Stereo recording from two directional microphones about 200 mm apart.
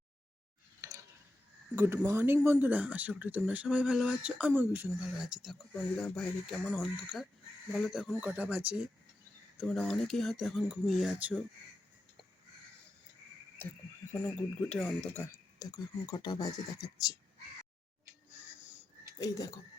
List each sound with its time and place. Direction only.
0.8 s a sound: 15° right (ahead or behind)
1.7 s speech: 10° right (ahead or behind)
13.6 s speech: 10° left (ahead or behind)
15.5 s speech: 20° left (ahead or behind)
19.2 s speech: 15° left (ahead or behind)